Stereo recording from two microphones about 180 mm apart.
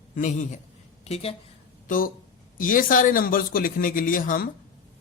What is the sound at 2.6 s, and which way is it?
Speech, 50° left (ahead or behind).